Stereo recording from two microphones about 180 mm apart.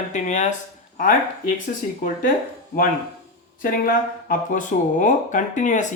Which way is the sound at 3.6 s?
50° left (ahead or behind).